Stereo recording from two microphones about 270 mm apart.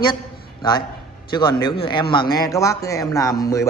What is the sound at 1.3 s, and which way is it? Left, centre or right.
A man's voice, centre.